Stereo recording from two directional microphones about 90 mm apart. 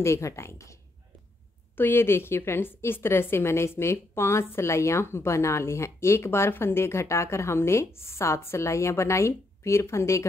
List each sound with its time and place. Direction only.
0.0 s a woman's voice: 35° left (ahead or behind)
1.8 s a woman's voice: 25° left (ahead or behind)